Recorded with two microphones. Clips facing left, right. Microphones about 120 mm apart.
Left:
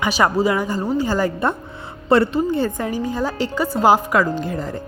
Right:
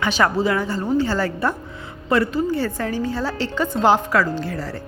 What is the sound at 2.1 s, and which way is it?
Speech, 25° left (ahead or behind).